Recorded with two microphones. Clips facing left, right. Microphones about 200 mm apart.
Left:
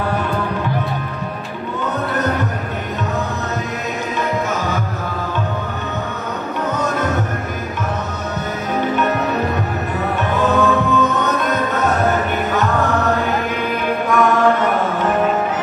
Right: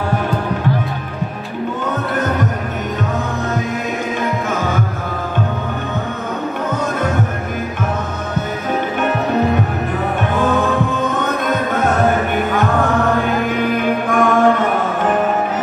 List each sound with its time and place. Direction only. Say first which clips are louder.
10.1 s music: even; 50° right (ahead or behind)